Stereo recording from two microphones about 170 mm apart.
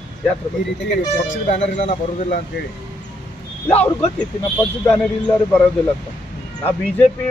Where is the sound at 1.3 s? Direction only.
40° left (ahead or behind).